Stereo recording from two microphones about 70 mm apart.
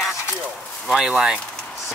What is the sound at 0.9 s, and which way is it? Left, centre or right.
Speech, centre.